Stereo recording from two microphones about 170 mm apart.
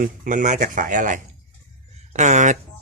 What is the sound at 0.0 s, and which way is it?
Speech, 50° right (ahead or behind).